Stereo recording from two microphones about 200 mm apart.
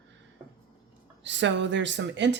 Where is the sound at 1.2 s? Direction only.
65° right (ahead or behind).